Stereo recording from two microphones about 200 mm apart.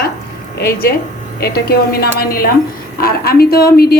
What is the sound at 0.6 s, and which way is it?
A woman's voice, 50° left (ahead or behind).